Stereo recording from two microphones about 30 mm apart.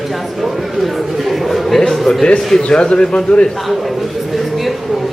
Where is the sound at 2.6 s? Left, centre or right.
Left.